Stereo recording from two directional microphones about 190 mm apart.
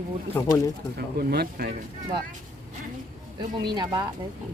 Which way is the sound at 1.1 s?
55° right (ahead or behind).